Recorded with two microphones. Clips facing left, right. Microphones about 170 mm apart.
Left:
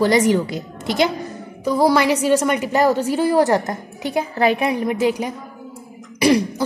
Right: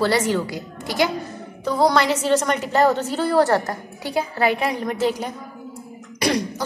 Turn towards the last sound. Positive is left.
turn(degrees=10)  # may be behind; listen again after turning